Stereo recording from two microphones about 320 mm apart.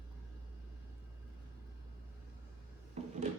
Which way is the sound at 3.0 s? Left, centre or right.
Right.